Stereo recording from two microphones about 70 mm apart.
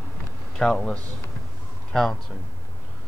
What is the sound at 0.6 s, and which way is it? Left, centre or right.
A man's voice, centre.